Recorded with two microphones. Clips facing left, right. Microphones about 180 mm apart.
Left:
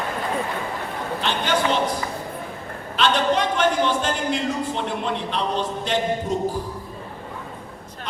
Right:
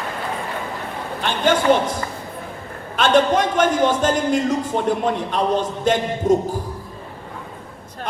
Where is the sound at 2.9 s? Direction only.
45° right (ahead or behind).